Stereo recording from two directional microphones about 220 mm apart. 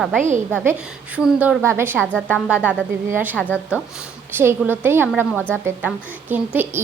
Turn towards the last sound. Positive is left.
turn(degrees=-10)  # may be behind; listen again after turning